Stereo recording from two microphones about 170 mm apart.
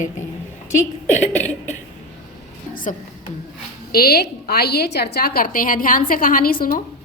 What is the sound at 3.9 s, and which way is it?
A woman's voice, 65° left (ahead or behind).